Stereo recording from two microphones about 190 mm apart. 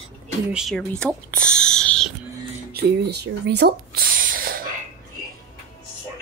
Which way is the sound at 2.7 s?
60° right (ahead or behind).